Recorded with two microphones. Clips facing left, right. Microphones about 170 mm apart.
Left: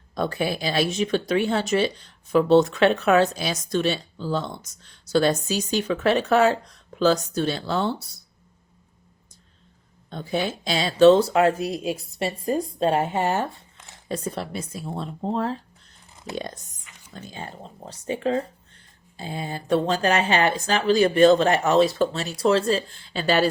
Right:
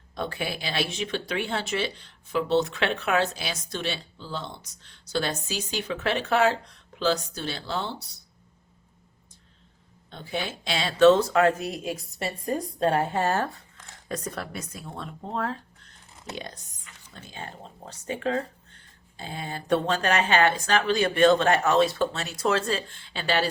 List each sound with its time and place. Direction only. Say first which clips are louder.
0.1 s speech: left 6 dB; 40° left (ahead or behind)
10.1 s speech: left 6 dB; 45° left (ahead or behind)
16.3 s speech: left 6 dB; 45° left (ahead or behind)